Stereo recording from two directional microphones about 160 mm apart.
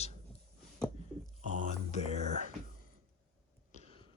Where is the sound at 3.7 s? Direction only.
40° left (ahead or behind).